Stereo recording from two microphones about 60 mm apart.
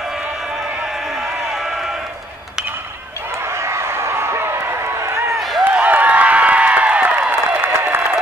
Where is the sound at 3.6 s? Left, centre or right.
Right.